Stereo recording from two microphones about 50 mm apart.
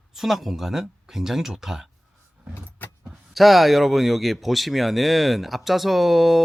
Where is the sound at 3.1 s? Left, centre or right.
Centre.